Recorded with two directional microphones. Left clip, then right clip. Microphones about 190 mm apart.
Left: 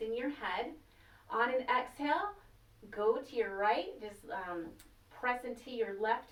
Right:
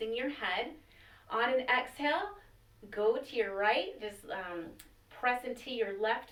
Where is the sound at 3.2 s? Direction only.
20° left (ahead or behind).